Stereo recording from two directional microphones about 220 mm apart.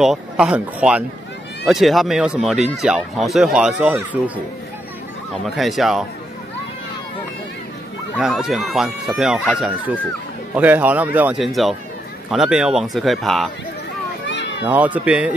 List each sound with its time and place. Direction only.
0.0 s speech: 5° right (ahead or behind)
5.4 s speech: centre (ahead or behind)
8.2 s a man's voice: centre (ahead or behind)
14.2 s children playing: 55° left (ahead or behind)
14.6 s a man's voice: 5° right (ahead or behind)